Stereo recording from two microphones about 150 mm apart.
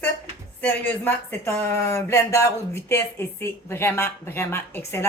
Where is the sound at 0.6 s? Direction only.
10° left (ahead or behind).